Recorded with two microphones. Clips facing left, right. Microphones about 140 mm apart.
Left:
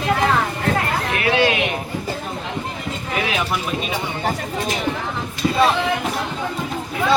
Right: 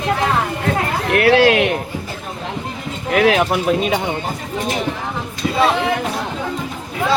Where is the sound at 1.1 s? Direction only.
70° right (ahead or behind).